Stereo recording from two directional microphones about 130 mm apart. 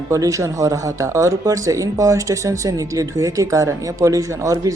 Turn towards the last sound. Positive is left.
turn(degrees=-25)  # may be behind; listen again after turning